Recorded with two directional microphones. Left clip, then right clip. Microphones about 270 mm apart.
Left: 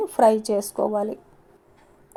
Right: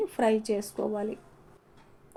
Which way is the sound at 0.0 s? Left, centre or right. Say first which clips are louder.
Left 8 dB; left.